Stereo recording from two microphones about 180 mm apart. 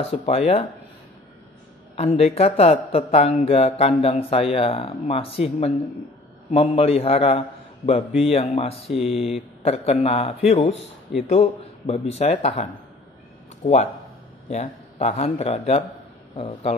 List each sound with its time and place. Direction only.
0.0 s speech: 35° left (ahead or behind)
2.0 s speech: 35° left (ahead or behind)
8.9 s speech: centre (ahead or behind)
9.6 s speech: 35° left (ahead or behind)
14.5 s speech: 40° left (ahead or behind)